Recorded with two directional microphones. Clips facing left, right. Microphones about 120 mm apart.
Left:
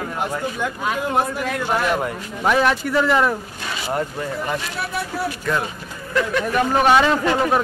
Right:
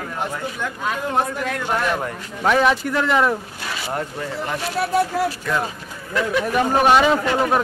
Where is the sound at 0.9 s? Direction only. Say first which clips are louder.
Even; 5° left (ahead or behind).